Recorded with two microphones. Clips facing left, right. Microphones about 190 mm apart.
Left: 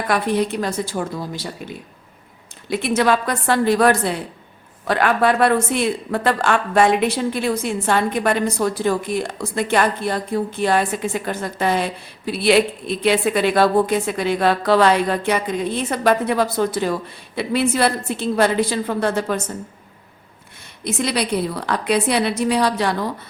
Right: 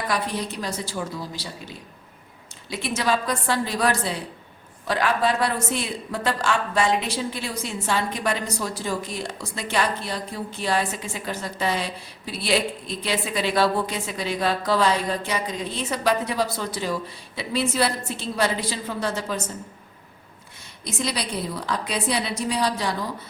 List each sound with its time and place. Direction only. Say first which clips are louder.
0.1 s a woman's voice: left 11 dB; 60° left (ahead or behind)
2.6 s a woman's voice: left 7 dB; 55° left (ahead or behind)
20.8 s a woman's voice: left 6 dB; 60° left (ahead or behind)